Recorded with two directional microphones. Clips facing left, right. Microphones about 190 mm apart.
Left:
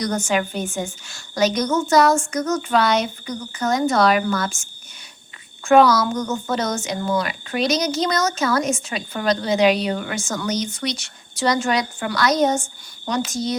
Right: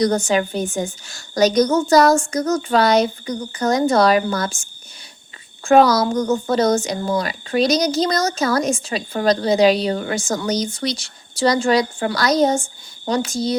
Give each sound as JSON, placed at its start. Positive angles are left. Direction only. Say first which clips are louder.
{"t": 0.0, "sound": "a woman's voice", "louder": "right 4 dB", "side_deg": -35}